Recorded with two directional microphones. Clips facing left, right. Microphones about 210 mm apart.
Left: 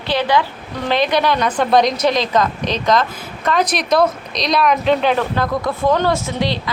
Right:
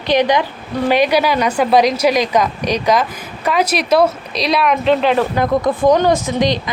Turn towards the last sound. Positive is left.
turn(degrees=-15)  # may be behind; listen again after turning